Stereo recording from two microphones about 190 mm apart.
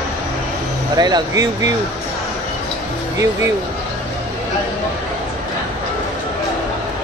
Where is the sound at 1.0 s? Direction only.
20° right (ahead or behind).